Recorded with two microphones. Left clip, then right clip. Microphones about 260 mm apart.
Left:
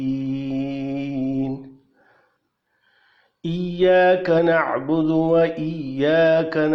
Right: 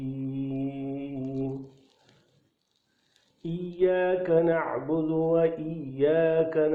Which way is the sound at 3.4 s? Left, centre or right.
Left.